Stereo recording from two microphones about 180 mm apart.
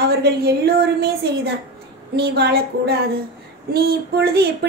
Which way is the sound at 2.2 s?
65° right (ahead or behind).